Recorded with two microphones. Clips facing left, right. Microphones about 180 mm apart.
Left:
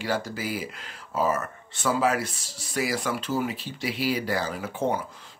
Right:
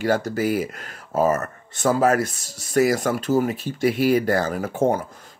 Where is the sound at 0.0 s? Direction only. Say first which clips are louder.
Right 8 dB; 45° right (ahead or behind).